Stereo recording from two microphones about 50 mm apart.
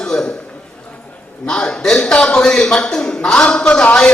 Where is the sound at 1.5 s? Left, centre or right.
Centre.